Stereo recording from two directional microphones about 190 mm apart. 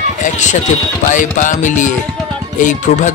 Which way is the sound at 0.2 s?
40° left (ahead or behind).